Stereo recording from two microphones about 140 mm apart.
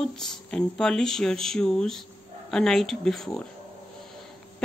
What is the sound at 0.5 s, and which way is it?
Speech, 5° left (ahead or behind).